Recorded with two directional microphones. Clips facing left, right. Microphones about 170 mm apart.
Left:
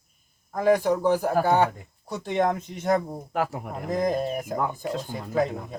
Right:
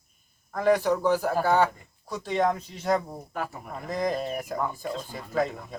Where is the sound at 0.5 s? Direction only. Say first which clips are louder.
Left 2 dB; 10° left (ahead or behind).